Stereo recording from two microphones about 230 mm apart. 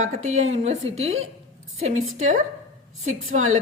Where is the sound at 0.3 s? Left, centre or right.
Right.